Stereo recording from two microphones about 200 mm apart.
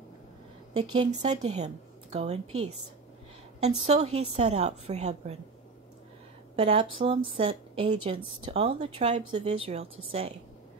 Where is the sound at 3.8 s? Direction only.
30° right (ahead or behind).